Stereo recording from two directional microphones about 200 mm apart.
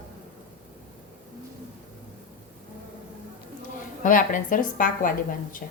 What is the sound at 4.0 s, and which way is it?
A woman's voice, 40° left (ahead or behind).